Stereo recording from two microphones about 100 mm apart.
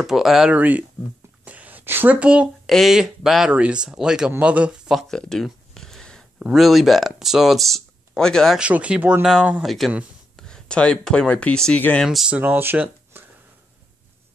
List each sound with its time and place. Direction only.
0.0 s speech: 5° right (ahead or behind)
0.6 s speech: 15° right (ahead or behind)
1.4 s a sound: 15° right (ahead or behind)
2.7 s speech: centre (ahead or behind)
4.9 s a sound: 5° left (ahead or behind)
6.4 s speech: centre (ahead or behind)
8.5 s speech: 10° right (ahead or behind); by 11.8 s 10° left (ahead or behind)
12.0 s speech: centre (ahead or behind)
12.3 s speech: 20° right (ahead or behind)